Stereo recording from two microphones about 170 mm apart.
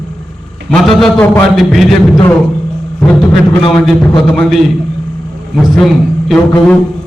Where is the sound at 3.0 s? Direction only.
5° left (ahead or behind).